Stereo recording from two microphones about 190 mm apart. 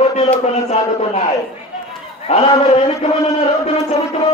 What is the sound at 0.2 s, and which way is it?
Speech, 35° left (ahead or behind).